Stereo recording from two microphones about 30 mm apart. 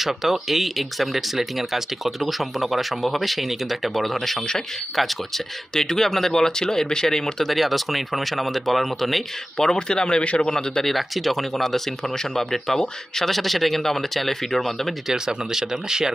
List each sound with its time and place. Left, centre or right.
0.0 s speech: centre
5.7 s speech: left
7.4 s speech: centre
9.6 s speech: left
10.5 s speech: centre
10.9 s speech: centre
15.3 s speech: centre